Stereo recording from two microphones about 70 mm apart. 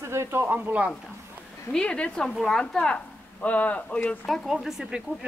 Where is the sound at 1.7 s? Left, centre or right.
Centre.